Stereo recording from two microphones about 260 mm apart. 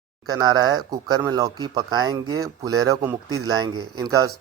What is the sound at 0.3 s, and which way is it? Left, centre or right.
A man's voice, centre.